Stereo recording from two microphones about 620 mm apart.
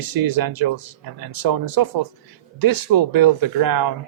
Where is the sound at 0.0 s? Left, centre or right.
Right.